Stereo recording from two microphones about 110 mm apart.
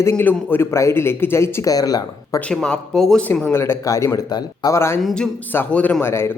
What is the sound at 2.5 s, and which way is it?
Speech, 5° left (ahead or behind).